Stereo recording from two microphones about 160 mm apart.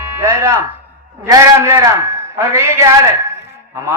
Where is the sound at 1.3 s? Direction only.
20° right (ahead or behind).